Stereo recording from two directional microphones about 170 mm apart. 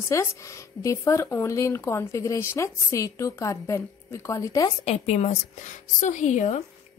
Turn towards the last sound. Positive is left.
turn(degrees=45)  # may be behind; listen again after turning